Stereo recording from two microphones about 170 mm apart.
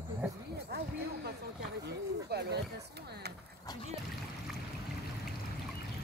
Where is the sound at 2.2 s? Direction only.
70° right (ahead or behind).